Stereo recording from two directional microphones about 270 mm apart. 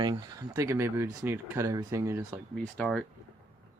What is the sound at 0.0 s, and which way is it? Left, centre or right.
Speech, centre.